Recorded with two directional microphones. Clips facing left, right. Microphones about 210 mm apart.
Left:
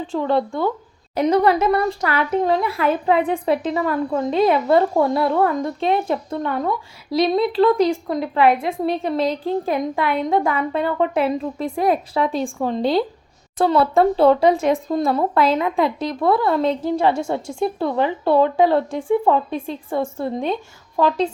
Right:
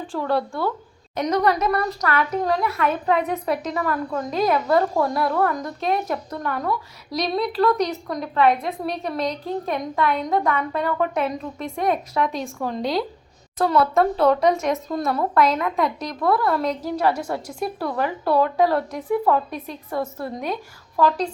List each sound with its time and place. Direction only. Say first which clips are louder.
0.1 s a woman's voice: left 3 dB; 20° left (ahead or behind)